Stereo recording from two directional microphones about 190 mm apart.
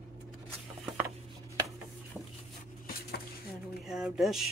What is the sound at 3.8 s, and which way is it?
Speech, centre (ahead or behind).